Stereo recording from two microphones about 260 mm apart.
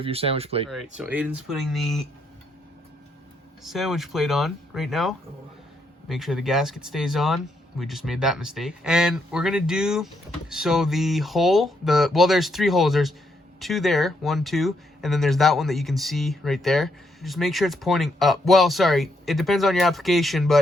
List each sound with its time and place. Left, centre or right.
0.0 s speech: right
0.7 s speech: centre
3.6 s speech: centre